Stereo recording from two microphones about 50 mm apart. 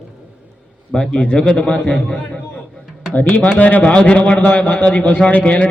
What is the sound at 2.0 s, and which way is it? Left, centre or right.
Speech, centre.